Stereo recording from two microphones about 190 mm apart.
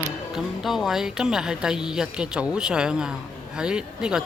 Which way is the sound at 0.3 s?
Centre (ahead or behind).